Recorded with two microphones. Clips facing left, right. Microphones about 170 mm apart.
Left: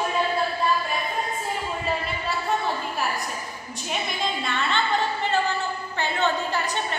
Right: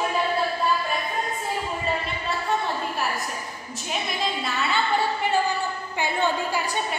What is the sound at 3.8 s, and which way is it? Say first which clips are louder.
A woman's voice: even; centre (ahead or behind).